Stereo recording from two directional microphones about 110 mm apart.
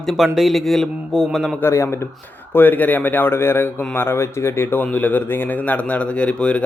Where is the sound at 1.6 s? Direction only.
20° left (ahead or behind).